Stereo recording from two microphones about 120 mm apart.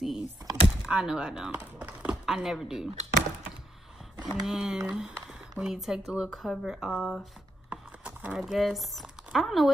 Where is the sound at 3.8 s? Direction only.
Centre (ahead or behind).